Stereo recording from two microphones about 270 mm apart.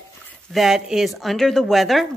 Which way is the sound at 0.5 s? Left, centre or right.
Centre.